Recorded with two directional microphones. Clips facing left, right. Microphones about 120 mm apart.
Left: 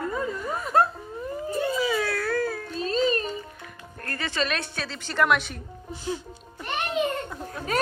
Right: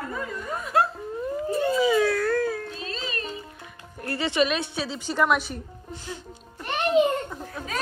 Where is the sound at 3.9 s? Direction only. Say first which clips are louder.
Right 5 dB; 15° right (ahead or behind).